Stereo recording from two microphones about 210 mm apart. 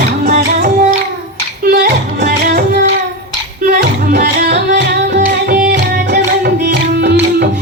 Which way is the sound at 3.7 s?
45° right (ahead or behind).